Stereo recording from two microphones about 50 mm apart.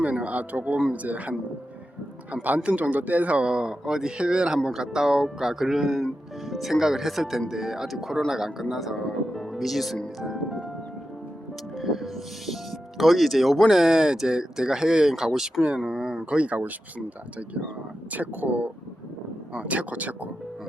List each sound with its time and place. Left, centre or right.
0.0 s speech: right; by 10.0 s centre
10.2 s music: centre
11.8 s music: centre
13.0 s speech: centre
16.4 s speech: right
18.1 s speech: right